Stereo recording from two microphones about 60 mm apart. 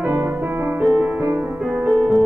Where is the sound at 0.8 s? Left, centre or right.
Right.